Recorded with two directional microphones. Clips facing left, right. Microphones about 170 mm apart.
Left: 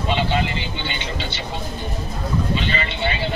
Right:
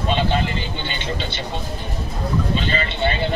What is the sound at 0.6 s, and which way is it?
Speech, 45° right (ahead or behind).